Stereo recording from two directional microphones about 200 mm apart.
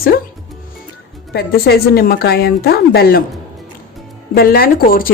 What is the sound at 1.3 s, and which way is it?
A woman's voice, 50° left (ahead or behind).